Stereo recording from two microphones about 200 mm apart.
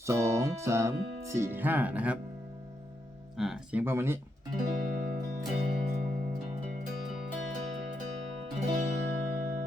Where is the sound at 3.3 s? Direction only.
Centre (ahead or behind).